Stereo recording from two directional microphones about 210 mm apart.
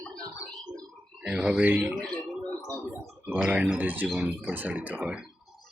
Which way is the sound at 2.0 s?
5° left (ahead or behind).